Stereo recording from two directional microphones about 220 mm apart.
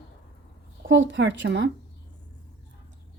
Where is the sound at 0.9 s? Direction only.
55° right (ahead or behind).